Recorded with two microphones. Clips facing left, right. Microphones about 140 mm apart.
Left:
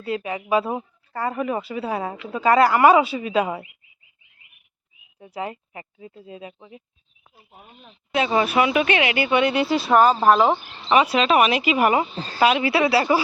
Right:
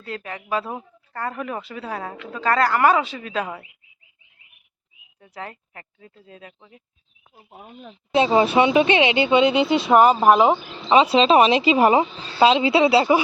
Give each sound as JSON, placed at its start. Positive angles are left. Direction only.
{"t": 0.0, "sound": "speech", "side_deg": 10}
{"t": 5.2, "sound": "speech", "side_deg": 10}
{"t": 8.1, "sound": "speech", "side_deg": -30}
{"t": 12.1, "sound": "speech", "side_deg": 40}
{"t": 12.4, "sound": "speech", "side_deg": -25}